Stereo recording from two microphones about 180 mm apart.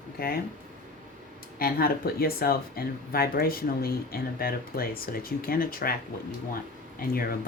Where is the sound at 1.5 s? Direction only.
55° left (ahead or behind).